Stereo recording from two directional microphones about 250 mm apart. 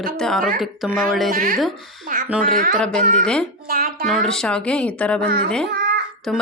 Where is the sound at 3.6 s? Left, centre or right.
Right.